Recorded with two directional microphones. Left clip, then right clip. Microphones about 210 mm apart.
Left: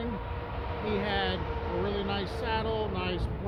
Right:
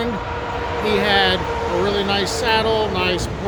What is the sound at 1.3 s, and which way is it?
Speech, 35° left (ahead or behind).